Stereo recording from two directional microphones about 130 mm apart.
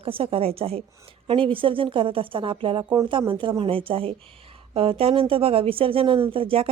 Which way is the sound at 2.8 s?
30° right (ahead or behind).